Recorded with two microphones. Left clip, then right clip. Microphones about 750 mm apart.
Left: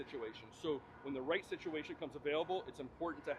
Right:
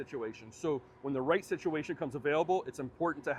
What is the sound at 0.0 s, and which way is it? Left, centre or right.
Speech, right.